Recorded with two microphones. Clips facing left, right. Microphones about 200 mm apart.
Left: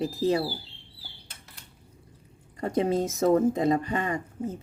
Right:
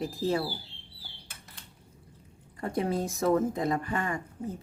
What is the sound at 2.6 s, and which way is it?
Speech, 20° left (ahead or behind).